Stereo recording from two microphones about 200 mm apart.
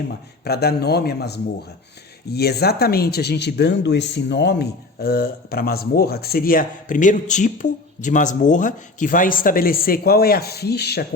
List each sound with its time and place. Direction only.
0.4 s a man's voice: 55° left (ahead or behind)